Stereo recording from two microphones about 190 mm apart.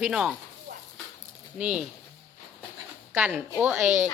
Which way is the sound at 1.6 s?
5° right (ahead or behind).